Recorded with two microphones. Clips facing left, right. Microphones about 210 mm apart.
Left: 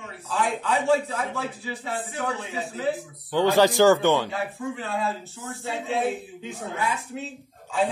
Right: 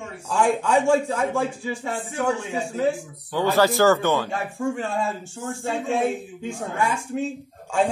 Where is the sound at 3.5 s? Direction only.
15° left (ahead or behind).